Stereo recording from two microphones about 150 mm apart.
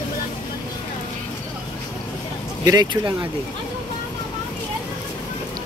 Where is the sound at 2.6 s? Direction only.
25° right (ahead or behind).